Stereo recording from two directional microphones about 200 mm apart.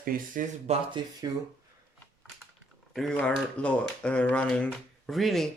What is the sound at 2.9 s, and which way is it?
Speech, centre (ahead or behind).